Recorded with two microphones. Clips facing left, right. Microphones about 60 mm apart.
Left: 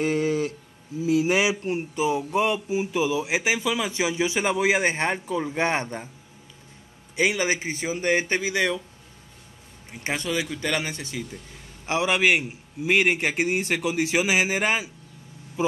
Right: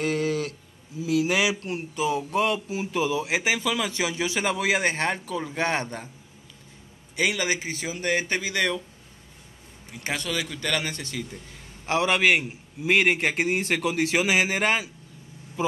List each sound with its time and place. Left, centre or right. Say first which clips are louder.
0.0 s a sound: left 2 dB; left
1.0 s speech: left 2 dB; left
7.2 s speech: left 2 dB; left
9.8 s speech: left 2 dB; left; by 14.9 s centre